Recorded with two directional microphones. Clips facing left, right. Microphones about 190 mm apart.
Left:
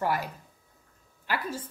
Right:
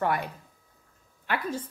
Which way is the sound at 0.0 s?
5° left (ahead or behind).